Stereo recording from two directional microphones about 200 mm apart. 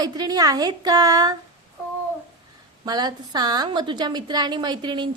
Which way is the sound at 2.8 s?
20° right (ahead or behind).